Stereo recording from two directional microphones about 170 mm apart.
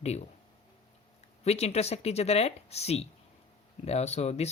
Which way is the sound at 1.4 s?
40° left (ahead or behind).